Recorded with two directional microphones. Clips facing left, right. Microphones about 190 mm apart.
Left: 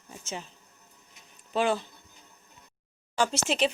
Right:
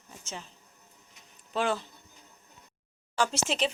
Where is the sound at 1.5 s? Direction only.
5° left (ahead or behind).